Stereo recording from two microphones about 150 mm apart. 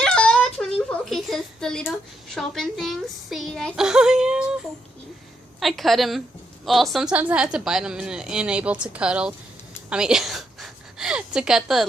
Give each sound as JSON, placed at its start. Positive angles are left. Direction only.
{"t": 0.0, "sound": "a sound", "side_deg": 5}
{"t": 2.3, "sound": "a woman's voice", "side_deg": 0}
{"t": 5.5, "sound": "a woman's voice", "side_deg": 0}